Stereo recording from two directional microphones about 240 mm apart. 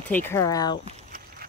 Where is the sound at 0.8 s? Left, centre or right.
Right.